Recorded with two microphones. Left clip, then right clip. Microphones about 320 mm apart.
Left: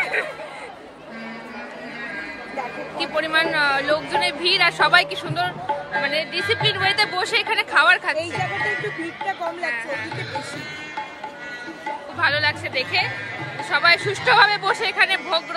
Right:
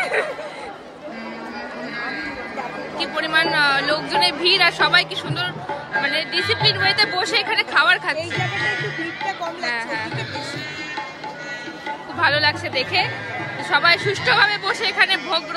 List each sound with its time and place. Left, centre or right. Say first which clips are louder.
0.0 s a sound: right 2 dB; centre
3.0 s a woman's voice: right 1 dB; centre
8.2 s speech: right 1 dB; left
9.7 s a woman's voice: right 5 dB; centre
12.2 s a woman's voice: right 2 dB; centre